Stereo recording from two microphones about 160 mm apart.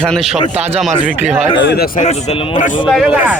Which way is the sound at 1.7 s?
75° left (ahead or behind).